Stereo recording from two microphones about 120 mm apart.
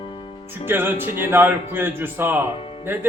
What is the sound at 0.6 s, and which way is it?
Speech, 20° right (ahead or behind).